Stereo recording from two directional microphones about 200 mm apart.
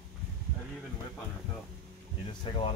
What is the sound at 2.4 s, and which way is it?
Speech, 25° left (ahead or behind).